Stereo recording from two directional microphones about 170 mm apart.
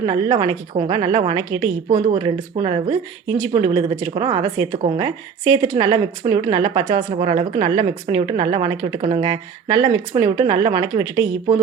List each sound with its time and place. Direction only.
0.0 s a woman's voice: 25° right (ahead or behind)